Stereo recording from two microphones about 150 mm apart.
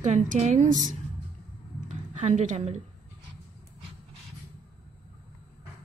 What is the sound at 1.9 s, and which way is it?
Speech, 50° right (ahead or behind).